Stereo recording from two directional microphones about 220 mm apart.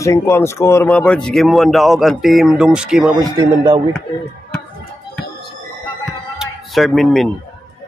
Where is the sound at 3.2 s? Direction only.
20° right (ahead or behind).